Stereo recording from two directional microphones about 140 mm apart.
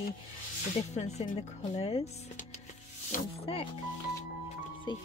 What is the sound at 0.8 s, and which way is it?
Speech, 55° left (ahead or behind).